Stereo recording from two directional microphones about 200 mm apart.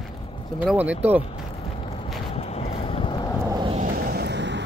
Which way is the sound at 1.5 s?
30° left (ahead or behind).